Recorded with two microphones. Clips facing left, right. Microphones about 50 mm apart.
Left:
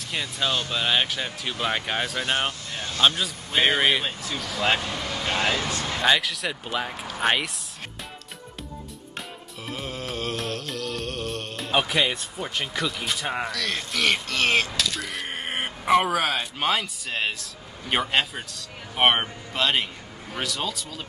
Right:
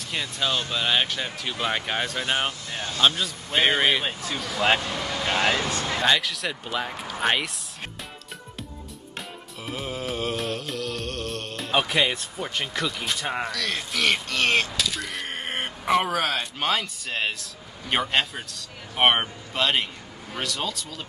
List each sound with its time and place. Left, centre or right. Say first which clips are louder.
0.0 s speech: even; centre
2.7 s speech: right 1 dB; centre
3.0 s speech: left 1 dB; centre
5.9 s speech: left 1 dB; centre
9.7 s music: right 2 dB; centre
20.3 s speech: even; centre